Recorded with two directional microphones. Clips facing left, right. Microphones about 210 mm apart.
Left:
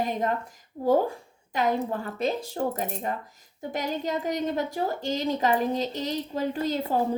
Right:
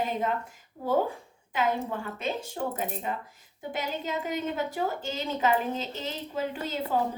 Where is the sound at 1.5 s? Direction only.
40° left (ahead or behind).